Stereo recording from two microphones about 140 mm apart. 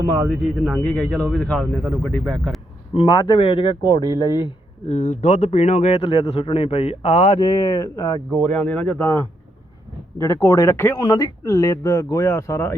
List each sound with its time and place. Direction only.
0.3 s speech: centre (ahead or behind)
2.9 s speech: 45° left (ahead or behind); by 4.4 s 30° left (ahead or behind)
4.9 s speech: 65° left (ahead or behind)
7.3 s speech: 30° left (ahead or behind)
8.5 s speech: 10° left (ahead or behind)